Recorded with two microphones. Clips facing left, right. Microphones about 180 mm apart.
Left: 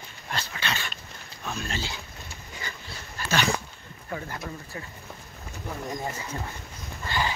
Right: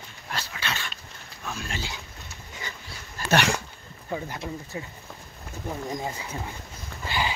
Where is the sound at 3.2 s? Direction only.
70° right (ahead or behind).